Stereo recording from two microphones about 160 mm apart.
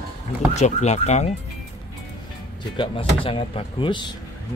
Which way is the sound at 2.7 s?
35° left (ahead or behind).